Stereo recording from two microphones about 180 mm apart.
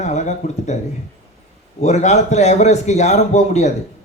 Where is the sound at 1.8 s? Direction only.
40° left (ahead or behind).